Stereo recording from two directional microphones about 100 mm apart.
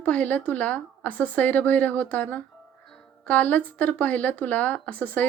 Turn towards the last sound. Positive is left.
turn(degrees=15)  # may be behind; listen again after turning